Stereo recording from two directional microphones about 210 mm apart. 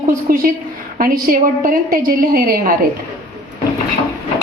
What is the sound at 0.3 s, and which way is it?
A woman's voice, 40° right (ahead or behind).